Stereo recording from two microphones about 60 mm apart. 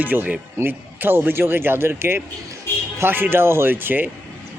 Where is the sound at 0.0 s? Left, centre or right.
Right.